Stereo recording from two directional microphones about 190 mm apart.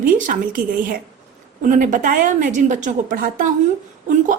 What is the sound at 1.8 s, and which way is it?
A woman's voice, 45° right (ahead or behind).